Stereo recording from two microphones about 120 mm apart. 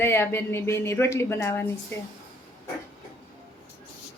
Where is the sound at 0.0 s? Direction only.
20° left (ahead or behind).